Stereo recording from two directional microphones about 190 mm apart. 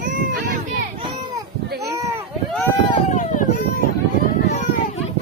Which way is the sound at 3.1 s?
40° left (ahead or behind).